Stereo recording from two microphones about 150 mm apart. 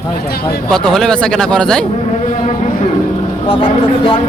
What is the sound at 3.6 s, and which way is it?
Speech, 35° left (ahead or behind).